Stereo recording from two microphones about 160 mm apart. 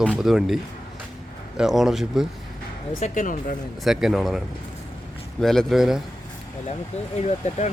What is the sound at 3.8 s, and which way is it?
Speech, centre (ahead or behind).